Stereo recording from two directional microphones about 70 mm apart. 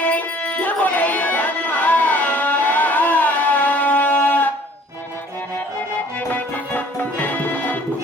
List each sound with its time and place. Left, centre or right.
0.0 s music: left
6.1 s music: left